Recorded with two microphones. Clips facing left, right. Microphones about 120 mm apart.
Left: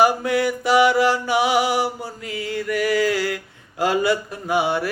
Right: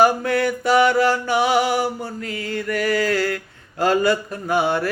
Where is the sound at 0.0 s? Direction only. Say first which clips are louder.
Right 1 dB; 10° left (ahead or behind).